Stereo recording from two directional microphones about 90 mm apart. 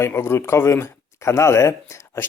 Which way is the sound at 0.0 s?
30° left (ahead or behind).